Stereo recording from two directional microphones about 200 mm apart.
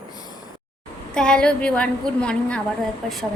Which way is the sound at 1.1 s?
5° left (ahead or behind).